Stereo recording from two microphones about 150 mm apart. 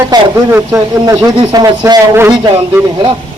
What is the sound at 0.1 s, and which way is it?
A man's voice, 15° right (ahead or behind).